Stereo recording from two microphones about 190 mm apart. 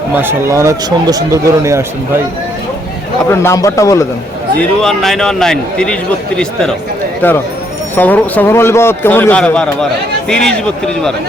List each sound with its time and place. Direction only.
0.2 s speech: 15° right (ahead or behind)
3.2 s speech: 15° left (ahead or behind)
4.8 s a man's voice: centre (ahead or behind)